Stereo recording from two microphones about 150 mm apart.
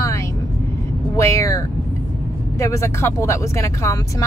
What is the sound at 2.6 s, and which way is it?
Speech, 20° left (ahead or behind).